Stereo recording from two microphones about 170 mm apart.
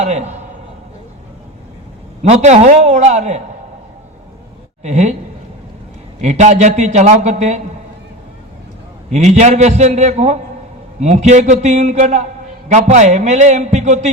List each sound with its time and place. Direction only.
0.0 s a man's voice: 40° right (ahead or behind)
2.2 s a man's voice: 40° right (ahead or behind)
4.8 s a man's voice: 40° right (ahead or behind)
6.2 s a man's voice: 45° right (ahead or behind)
9.0 s a man's voice: 40° right (ahead or behind)